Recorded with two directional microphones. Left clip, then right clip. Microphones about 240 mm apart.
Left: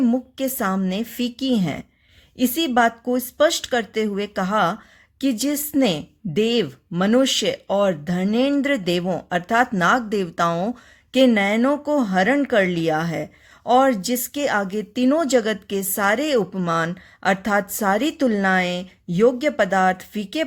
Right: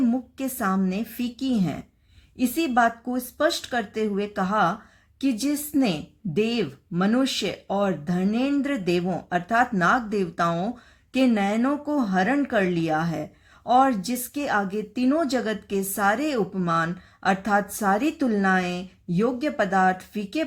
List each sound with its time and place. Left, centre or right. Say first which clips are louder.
0.0 s speech: left 4 dB; left